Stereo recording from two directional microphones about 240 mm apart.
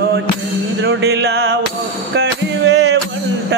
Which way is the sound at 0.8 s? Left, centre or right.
Right.